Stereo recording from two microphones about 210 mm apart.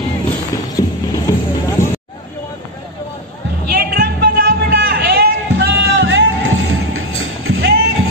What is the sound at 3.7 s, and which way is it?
Music, 45° right (ahead or behind).